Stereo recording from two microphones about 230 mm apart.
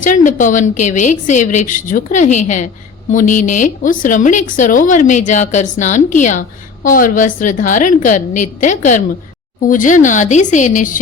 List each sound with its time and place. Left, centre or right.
0.0 s a woman's voice: left